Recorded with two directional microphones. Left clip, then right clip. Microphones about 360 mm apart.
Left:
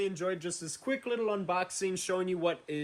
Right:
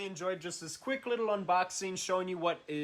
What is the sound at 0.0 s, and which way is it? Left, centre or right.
Speech, centre.